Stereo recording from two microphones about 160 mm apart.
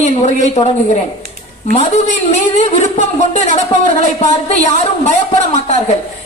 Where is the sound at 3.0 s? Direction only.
45° left (ahead or behind).